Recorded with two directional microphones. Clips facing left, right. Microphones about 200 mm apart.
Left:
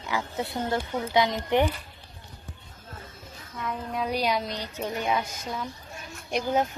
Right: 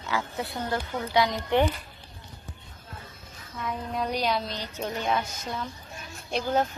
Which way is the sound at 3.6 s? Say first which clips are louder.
Even; centre (ahead or behind).